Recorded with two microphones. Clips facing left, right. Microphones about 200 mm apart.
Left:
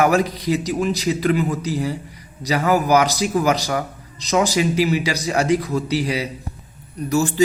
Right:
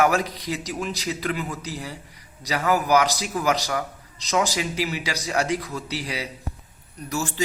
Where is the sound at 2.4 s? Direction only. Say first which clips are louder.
Left 5 dB; 10° left (ahead or behind).